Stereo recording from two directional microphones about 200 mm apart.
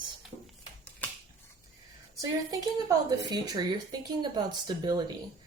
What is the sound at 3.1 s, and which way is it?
Speech, 20° right (ahead or behind).